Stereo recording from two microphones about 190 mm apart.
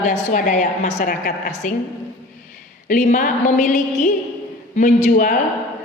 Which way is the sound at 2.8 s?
45° left (ahead or behind).